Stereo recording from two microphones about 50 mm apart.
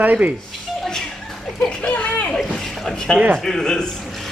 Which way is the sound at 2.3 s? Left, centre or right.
Centre.